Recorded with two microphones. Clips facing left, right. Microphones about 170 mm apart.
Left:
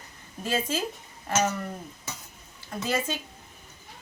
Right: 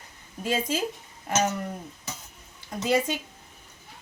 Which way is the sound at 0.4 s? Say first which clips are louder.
Right 1 dB; 10° right (ahead or behind).